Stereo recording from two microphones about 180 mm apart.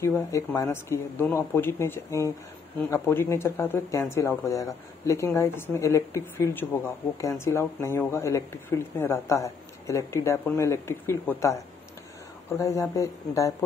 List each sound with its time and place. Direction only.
0.0 s speech: 10° left (ahead or behind)